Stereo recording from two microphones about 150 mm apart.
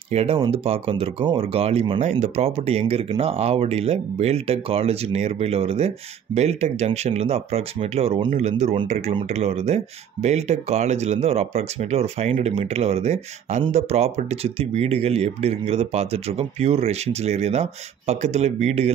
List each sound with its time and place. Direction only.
0.1 s speech: 40° right (ahead or behind)